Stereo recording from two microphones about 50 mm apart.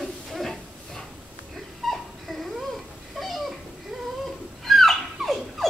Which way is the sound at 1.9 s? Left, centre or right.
Centre.